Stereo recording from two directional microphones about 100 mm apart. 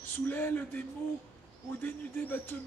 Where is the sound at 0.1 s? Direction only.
20° left (ahead or behind).